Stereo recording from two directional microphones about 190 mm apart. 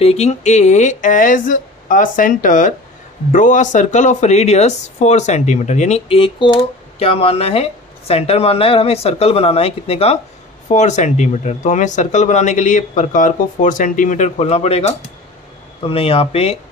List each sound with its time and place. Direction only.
0.0 s speech: 35° left (ahead or behind)